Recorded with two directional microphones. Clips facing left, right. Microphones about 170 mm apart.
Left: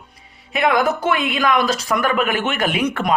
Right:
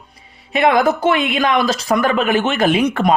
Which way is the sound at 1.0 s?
25° right (ahead or behind).